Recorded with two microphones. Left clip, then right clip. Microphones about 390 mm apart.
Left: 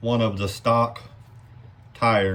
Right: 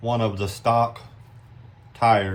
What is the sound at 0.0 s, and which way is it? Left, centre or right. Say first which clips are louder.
Speech: left 1 dB; centre.